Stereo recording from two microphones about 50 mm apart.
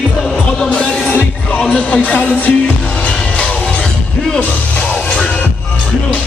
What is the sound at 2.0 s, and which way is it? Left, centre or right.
Music, left.